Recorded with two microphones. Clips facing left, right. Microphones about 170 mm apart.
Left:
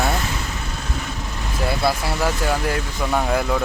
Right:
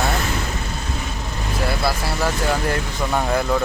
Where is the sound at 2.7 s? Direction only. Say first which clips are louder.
Even; 5° left (ahead or behind).